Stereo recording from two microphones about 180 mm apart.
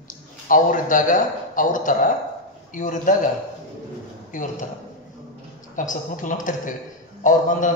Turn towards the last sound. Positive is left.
turn(degrees=45)  # may be behind; listen again after turning